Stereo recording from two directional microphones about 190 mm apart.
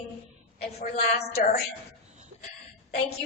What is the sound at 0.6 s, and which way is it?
Speech, 55° left (ahead or behind).